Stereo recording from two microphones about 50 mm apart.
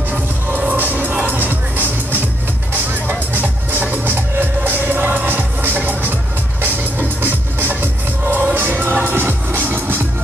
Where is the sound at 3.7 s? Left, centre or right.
Right.